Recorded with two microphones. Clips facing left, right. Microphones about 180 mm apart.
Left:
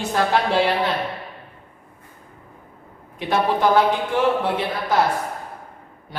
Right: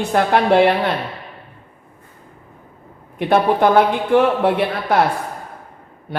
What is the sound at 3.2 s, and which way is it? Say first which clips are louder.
Speech: right 5 dB; 55° right (ahead or behind).